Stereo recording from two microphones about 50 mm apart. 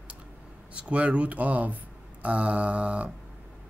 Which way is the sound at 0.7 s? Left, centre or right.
Right.